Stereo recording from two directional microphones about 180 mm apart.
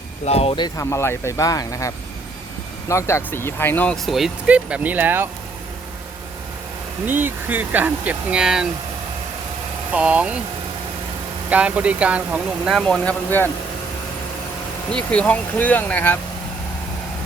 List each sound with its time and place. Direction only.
0.3 s speech: 35° left (ahead or behind)
2.9 s speech: 15° left (ahead or behind); by 5.3 s 10° right (ahead or behind)
7.1 s speech: 10° right (ahead or behind)
9.9 s speech: 5° right (ahead or behind)
11.4 s speech: 10° right (ahead or behind)
12.8 s speech: 5° left (ahead or behind)
14.9 s speech: 5° left (ahead or behind)